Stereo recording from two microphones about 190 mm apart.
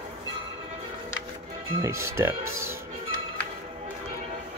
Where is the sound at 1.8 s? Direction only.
15° right (ahead or behind).